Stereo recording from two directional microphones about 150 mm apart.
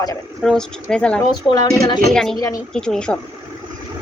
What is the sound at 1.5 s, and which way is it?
Speech, 25° left (ahead or behind).